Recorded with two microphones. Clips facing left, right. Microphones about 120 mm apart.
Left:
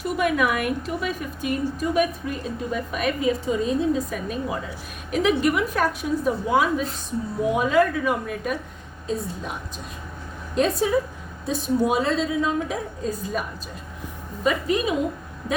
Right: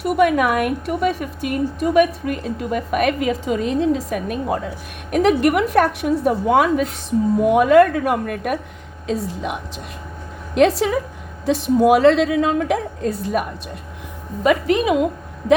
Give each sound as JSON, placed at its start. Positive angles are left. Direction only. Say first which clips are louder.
{"t": 0.0, "sound": "a woman's voice", "louder": "right 6 dB", "side_deg": -50}
{"t": 9.0, "sound": "a woman's voice", "louder": "right 5 dB", "side_deg": -90}
{"t": 14.4, "sound": "a woman's voice", "louder": "right 6 dB", "side_deg": -70}